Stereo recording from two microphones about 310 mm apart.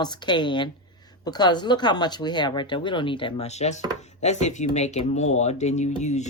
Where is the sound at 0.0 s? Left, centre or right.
Centre.